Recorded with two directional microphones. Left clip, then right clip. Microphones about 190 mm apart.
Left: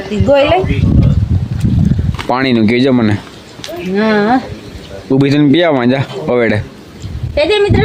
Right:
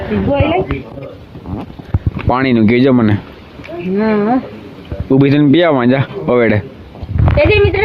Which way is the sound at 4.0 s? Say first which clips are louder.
Left 3 dB; 20° right (ahead or behind).